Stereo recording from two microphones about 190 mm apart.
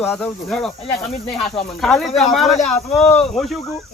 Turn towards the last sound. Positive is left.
turn(degrees=0)  # may be behind; listen again after turning